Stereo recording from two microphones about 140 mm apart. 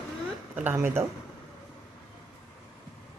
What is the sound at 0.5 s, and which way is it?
Speech, 15° right (ahead or behind).